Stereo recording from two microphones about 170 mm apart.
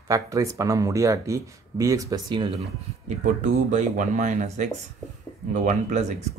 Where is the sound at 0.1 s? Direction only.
20° right (ahead or behind).